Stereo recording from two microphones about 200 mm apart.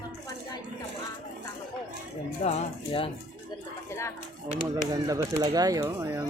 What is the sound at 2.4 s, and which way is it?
Speech, 30° left (ahead or behind).